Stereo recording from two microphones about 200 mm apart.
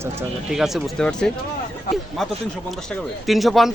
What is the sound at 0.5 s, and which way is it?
Speech, centre (ahead or behind).